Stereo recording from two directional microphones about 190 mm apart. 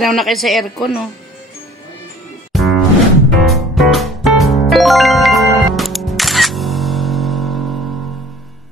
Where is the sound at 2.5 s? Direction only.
Centre (ahead or behind).